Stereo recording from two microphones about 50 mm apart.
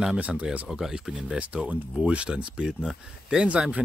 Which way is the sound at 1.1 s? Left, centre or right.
Right.